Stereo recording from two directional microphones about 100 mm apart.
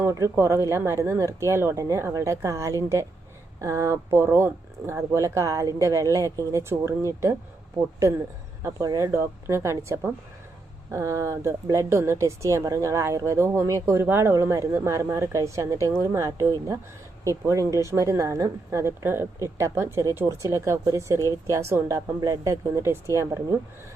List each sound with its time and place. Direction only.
0.0 s speech: 30° right (ahead or behind)